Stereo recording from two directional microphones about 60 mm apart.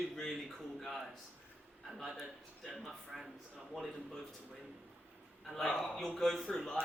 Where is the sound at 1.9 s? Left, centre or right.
Centre.